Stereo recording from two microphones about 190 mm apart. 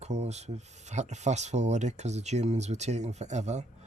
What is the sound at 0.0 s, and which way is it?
A woman's voice, 35° right (ahead or behind).